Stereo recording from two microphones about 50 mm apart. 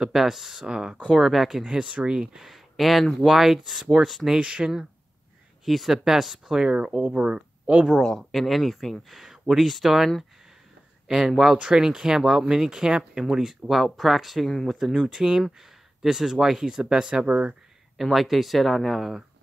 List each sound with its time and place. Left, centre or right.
0.0 s speech: centre
1.0 s speech: centre
1.8 s speech: centre
2.3 s speech: centre
4.4 s speech: centre
5.7 s speech: centre; by 7.8 s right
7.9 s speech: centre
11.5 s speech: centre
17.9 s speech: centre